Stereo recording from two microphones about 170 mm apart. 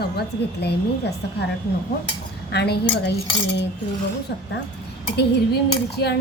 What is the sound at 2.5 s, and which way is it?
Speech, 80° left.